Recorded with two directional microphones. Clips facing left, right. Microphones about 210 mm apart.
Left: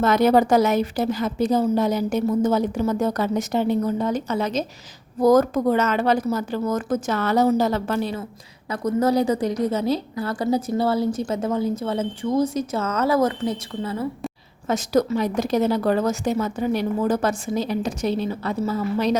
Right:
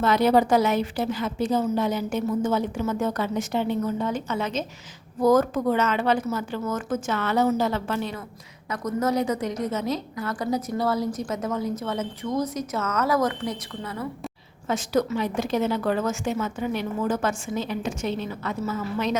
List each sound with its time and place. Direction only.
0.0 s a woman's voice: 45° left (ahead or behind); by 14.1 s 30° left (ahead or behind)
14.7 s a woman's voice: 40° left (ahead or behind)